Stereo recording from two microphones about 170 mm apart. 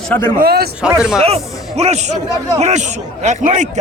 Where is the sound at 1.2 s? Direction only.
35° right (ahead or behind).